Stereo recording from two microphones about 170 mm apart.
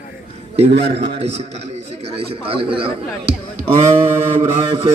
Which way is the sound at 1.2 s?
40° right (ahead or behind).